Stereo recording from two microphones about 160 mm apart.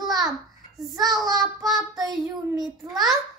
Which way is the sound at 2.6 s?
Centre (ahead or behind).